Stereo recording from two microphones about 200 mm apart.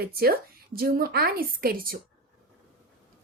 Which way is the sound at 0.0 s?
50° right (ahead or behind).